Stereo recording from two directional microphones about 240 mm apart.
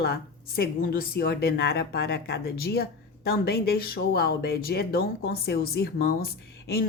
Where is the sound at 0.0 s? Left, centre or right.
Left.